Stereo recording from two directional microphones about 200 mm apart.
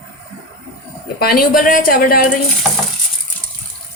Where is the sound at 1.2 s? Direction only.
50° left (ahead or behind).